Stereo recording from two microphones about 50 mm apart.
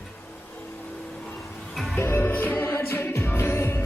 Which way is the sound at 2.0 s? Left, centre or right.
Left.